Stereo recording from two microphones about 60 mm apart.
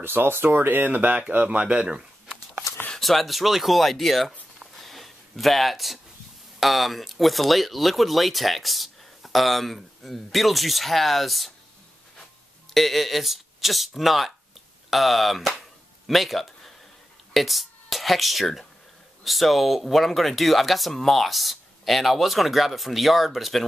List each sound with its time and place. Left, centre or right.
0.0 s speech: right; by 2.0 s centre
3.0 s speech: centre
4.6 s a sound: centre
6.6 s speech: centre
12.7 s speech: centre